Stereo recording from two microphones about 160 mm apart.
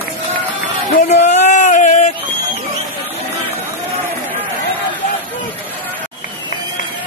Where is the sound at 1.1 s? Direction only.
45° left (ahead or behind).